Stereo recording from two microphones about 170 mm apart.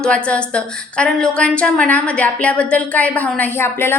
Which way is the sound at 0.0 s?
5° left (ahead or behind).